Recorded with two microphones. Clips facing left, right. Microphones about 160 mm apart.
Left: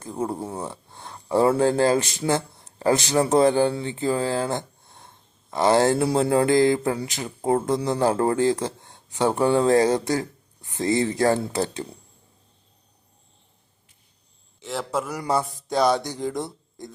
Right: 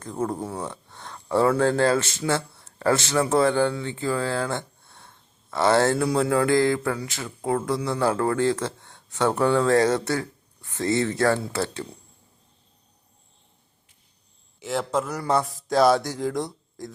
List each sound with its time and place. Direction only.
0.0 s speech: 10° left (ahead or behind)
0.4 s speech: 30° left (ahead or behind)
0.7 s speech: 10° left (ahead or behind)
6.0 s speech: 30° left (ahead or behind)
8.4 s speech: 15° left (ahead or behind)
14.6 s speech: centre (ahead or behind)